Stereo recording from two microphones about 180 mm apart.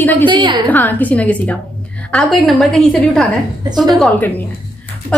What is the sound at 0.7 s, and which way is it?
A woman's voice, 10° left (ahead or behind).